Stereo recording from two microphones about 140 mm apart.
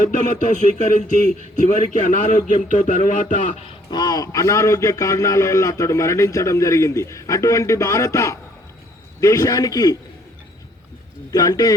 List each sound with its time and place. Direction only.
0.0 s speech: 65° left (ahead or behind)
3.9 s a man's voice: 25° left (ahead or behind)
11.3 s a man's voice: 25° left (ahead or behind)